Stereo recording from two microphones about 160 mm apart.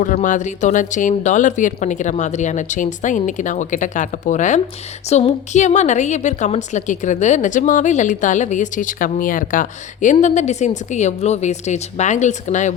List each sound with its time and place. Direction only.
0.0 s a woman's voice: 55° left (ahead or behind)